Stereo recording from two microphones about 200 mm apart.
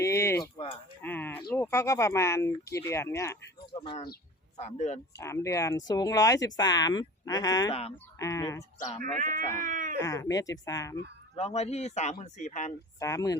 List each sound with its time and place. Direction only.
0.0 s a sound: 15° left (ahead or behind)
1.4 s speech: 15° left (ahead or behind)
4.5 s speech: 35° left (ahead or behind)
5.1 s speech: 15° left (ahead or behind)
9.1 s speech: 40° right (ahead or behind)
10.0 s speech: 15° left (ahead or behind)
11.3 s speech: 30° left (ahead or behind)
13.0 s speech: 15° left (ahead or behind)